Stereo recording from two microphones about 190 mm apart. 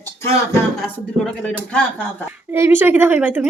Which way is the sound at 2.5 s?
10° right (ahead or behind).